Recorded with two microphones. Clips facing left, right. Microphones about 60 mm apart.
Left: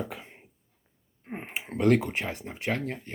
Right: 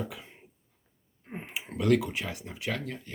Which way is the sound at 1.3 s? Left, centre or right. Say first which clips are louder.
Left 3 dB; left.